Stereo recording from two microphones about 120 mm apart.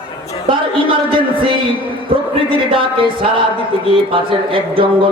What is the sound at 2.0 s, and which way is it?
Speech, 45° right (ahead or behind).